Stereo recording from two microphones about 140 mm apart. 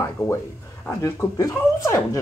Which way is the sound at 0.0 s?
20° left (ahead or behind).